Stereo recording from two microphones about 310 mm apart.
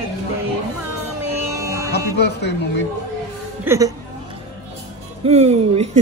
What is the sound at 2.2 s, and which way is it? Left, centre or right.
Speech, left.